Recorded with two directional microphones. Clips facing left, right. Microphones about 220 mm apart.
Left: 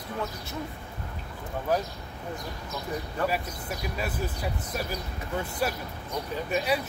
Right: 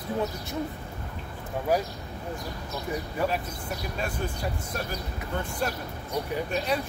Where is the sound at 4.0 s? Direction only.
5° left (ahead or behind).